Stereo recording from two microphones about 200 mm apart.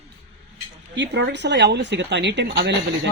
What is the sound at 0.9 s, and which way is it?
Speech, 60° right (ahead or behind).